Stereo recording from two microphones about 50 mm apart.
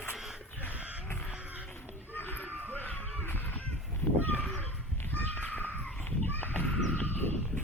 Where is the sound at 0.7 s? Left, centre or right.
Right.